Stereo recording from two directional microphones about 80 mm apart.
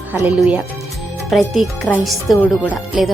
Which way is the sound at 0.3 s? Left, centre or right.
Centre.